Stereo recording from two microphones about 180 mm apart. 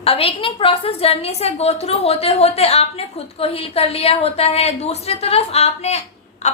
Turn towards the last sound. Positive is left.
turn(degrees=40)  # may be behind; listen again after turning